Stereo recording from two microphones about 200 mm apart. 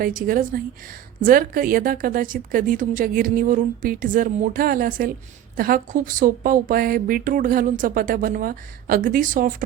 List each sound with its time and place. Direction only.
0.0 s speech: 45° right (ahead or behind)